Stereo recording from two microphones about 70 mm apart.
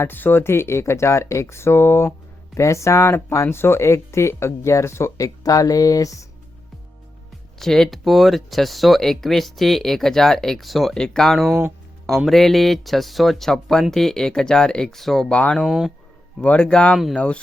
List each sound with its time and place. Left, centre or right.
0.0 s speech: left
7.6 s speech: centre
10.9 s speech: centre
15.3 s speech: centre
15.5 s speech: centre
16.4 s speech: centre